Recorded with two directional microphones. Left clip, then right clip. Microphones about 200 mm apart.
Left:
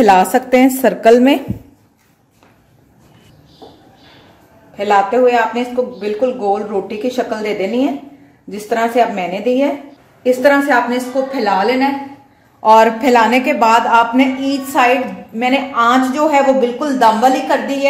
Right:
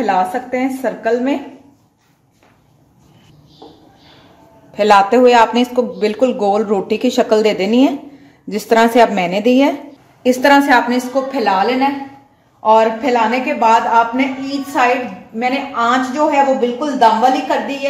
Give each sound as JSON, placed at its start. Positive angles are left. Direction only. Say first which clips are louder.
{"t": 0.0, "sound": "a woman's voice", "louder": "left 6 dB", "side_deg": 50}
{"t": 4.7, "sound": "speech", "louder": "right 2 dB", "side_deg": -55}
{"t": 10.9, "sound": "a woman's voice", "louder": "even", "side_deg": -20}
{"t": 12.6, "sound": "a woman's voice", "louder": "left 3 dB", "side_deg": 30}